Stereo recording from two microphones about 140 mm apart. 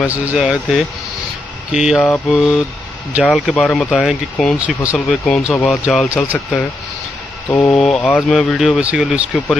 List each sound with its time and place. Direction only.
0.1 s speech: 10° right (ahead or behind)
2.0 s speech: 10° left (ahead or behind)
3.2 s speech: 5° right (ahead or behind)
3.5 s speech: 5° left (ahead or behind); by 4.9 s 10° right (ahead or behind)
4.9 s speech: 5° left (ahead or behind)
5.9 s speech: 5° right (ahead or behind)
7.4 s speech: 20° left (ahead or behind)
7.7 s speech: 5° left (ahead or behind)